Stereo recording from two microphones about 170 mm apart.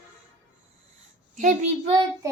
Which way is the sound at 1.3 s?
50° right (ahead or behind).